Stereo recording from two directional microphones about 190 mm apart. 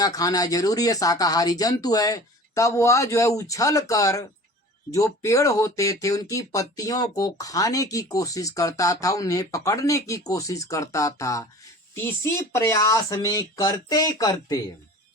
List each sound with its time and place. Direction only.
0.0 s speech: 20° left (ahead or behind)